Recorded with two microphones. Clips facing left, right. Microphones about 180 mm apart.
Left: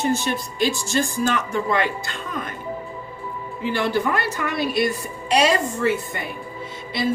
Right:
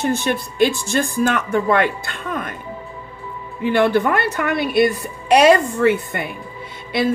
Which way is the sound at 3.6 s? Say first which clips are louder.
Right 6 dB; 60° right (ahead or behind).